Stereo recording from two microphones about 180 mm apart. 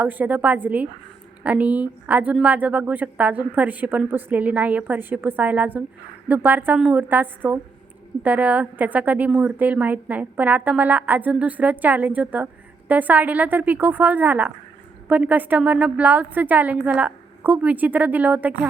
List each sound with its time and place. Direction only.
0.0 s a woman's voice: 10° right (ahead or behind)